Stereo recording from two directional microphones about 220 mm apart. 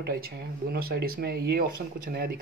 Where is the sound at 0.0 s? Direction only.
45° right (ahead or behind).